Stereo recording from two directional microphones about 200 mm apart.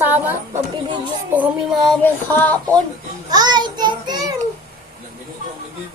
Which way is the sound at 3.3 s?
20° right (ahead or behind).